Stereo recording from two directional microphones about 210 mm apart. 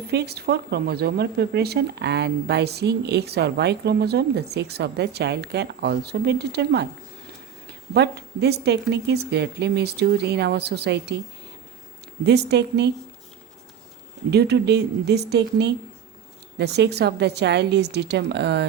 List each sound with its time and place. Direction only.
0.1 s speech: 50° right (ahead or behind)
12.2 s speech: 50° right (ahead or behind)
14.3 s speech: 50° right (ahead or behind)